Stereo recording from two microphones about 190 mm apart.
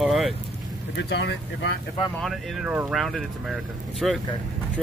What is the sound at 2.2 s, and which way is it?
Speech, centre (ahead or behind).